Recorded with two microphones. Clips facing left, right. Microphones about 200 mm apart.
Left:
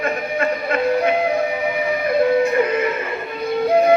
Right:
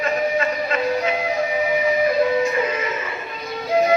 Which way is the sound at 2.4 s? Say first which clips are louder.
Left 4 dB; 60° left (ahead or behind).